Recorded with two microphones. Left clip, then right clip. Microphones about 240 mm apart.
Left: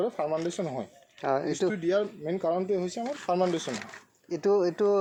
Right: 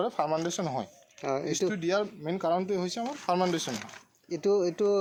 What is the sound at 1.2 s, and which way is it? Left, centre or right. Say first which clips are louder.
Speech: left 2 dB; centre.